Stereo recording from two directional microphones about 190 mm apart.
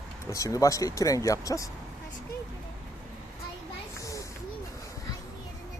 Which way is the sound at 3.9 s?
15° left (ahead or behind).